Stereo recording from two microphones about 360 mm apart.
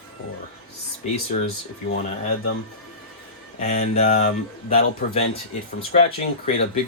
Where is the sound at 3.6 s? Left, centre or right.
Centre.